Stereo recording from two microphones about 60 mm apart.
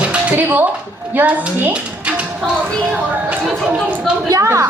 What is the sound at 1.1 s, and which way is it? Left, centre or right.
A woman's voice, right.